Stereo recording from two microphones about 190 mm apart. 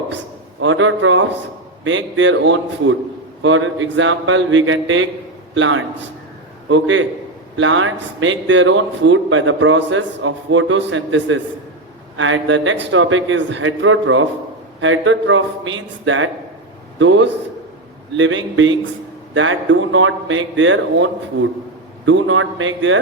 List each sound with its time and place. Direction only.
0.6 s a man's voice: 90° right
3.4 s a man's voice: 90° right